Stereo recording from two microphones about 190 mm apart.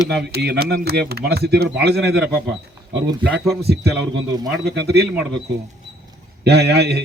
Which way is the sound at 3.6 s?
55° right (ahead or behind).